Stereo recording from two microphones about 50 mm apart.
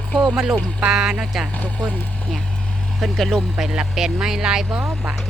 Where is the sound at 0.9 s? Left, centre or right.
Centre.